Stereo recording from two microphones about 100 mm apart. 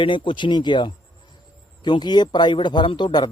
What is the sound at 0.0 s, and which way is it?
Speech, 60° left (ahead or behind).